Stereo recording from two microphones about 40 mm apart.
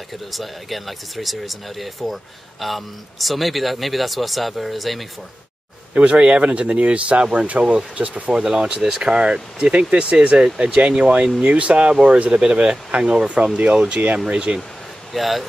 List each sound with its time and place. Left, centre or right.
0.3 s speech: centre
5.9 s speech: right
8.1 s speech: right
15.1 s speech: centre